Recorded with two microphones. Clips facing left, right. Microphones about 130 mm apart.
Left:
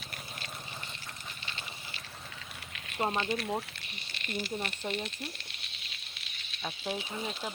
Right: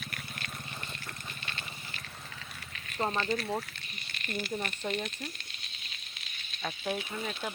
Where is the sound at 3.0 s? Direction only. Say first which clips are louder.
Even; 15° left (ahead or behind).